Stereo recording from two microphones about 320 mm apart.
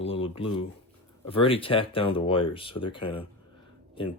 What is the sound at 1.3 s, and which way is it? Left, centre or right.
Speech, centre.